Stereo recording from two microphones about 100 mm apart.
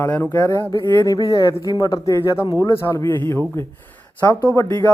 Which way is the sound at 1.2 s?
35° left (ahead or behind).